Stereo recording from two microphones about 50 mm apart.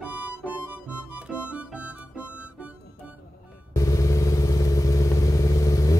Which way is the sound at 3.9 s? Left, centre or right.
Left.